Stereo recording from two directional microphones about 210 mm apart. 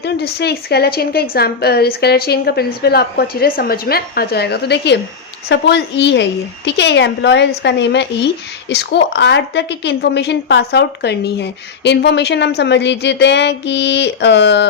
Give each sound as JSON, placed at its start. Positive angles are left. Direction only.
{"t": 0.0, "sound": "a woman's voice", "side_deg": 50}